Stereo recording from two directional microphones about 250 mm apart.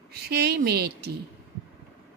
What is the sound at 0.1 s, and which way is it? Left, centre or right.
A woman's voice, right.